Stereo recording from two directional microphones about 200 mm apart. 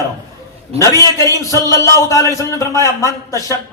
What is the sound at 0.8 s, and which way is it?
Speech, 15° left (ahead or behind).